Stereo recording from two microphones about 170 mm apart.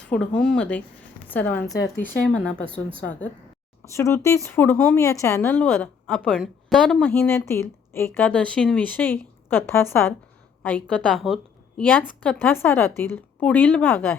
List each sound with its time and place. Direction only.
0.0 s a woman's voice: 5° left (ahead or behind)